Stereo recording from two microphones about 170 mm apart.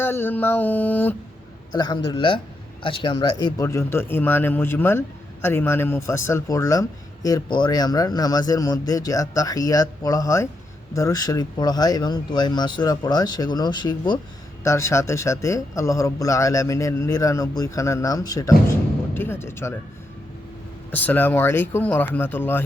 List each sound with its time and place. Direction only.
0.0 s speech: 10° left (ahead or behind)
1.7 s a man's voice: 25° left (ahead or behind)
20.9 s speech: 10° left (ahead or behind)